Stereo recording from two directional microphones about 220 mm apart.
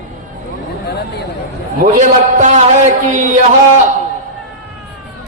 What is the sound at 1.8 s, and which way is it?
A man's voice, 35° right (ahead or behind).